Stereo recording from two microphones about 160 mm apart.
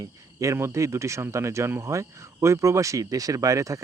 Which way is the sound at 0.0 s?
20° right (ahead or behind).